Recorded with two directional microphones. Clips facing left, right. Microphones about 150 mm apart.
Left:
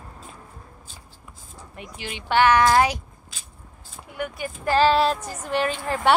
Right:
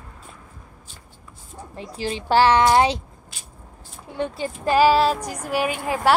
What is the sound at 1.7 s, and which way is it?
A woman's voice, 30° right (ahead or behind).